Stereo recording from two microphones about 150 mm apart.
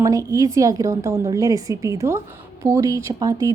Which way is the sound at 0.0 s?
20° right (ahead or behind).